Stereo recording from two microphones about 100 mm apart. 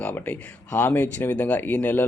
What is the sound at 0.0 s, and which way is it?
A man's voice, 15° left (ahead or behind).